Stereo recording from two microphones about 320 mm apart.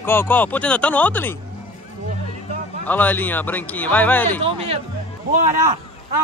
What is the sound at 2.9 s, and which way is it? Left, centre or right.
Speech, centre.